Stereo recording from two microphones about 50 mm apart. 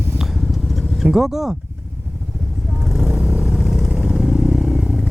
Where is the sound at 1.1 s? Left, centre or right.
Centre.